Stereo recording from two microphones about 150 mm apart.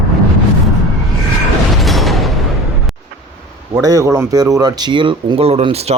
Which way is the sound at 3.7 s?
25° right (ahead or behind).